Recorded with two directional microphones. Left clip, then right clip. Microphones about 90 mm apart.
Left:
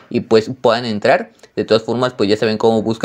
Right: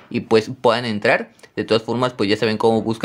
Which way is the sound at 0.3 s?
15° left (ahead or behind).